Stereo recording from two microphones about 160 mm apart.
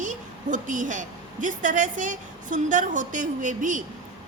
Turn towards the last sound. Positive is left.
turn(degrees=-55)  # may be behind; listen again after turning